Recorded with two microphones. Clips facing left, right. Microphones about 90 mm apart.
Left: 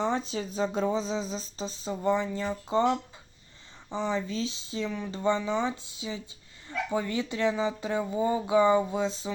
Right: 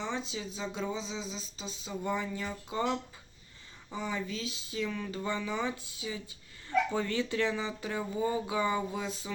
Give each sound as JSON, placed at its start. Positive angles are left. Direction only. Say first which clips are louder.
{"t": 0.0, "sound": "speech", "louder": "left 7 dB", "side_deg": 40}